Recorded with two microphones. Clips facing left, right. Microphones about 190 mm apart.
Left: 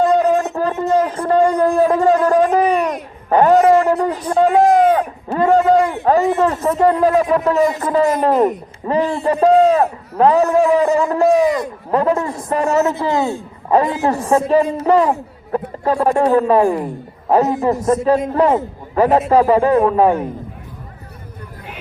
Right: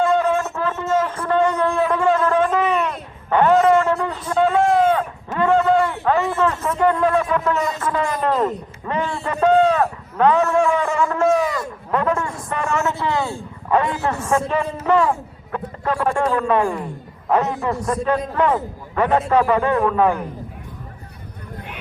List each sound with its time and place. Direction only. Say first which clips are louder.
0.0 s a sound: left 4 dB; 40° left (ahead or behind)
7.0 s a man's voice: left 5 dB; 35° left (ahead or behind)
8.3 s speech: left 5 dB; 20° left (ahead or behind)
8.9 s a man's voice: left 7 dB; 40° left (ahead or behind)
15.5 s a sound: left 6 dB; 35° left (ahead or behind)
16.5 s a man's voice: left 5 dB; 35° left (ahead or behind)
17.7 s a man's voice: left 6 dB; 25° left (ahead or behind)